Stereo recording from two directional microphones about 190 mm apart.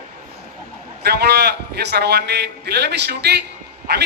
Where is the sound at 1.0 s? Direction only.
60° right (ahead or behind).